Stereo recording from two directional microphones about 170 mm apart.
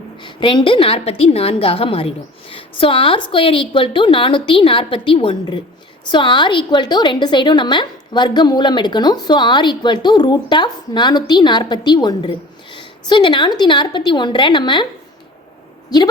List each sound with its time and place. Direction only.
0.2 s a woman's voice: 30° left (ahead or behind)